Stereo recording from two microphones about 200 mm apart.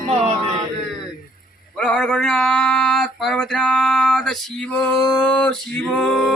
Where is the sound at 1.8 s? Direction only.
5° left (ahead or behind).